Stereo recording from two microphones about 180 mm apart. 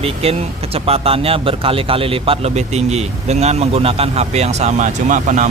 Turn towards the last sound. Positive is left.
turn(degrees=-45)  # may be behind; listen again after turning